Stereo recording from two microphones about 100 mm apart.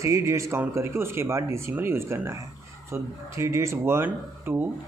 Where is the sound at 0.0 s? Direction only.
30° right (ahead or behind).